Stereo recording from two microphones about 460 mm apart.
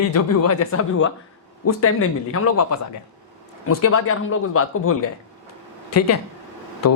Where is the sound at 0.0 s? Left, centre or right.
Left.